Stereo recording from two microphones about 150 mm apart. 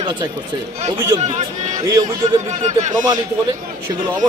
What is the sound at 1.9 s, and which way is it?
Speech, 25° right (ahead or behind).